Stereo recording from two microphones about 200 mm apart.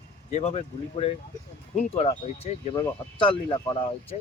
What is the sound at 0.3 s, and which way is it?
Speech, 35° left (ahead or behind).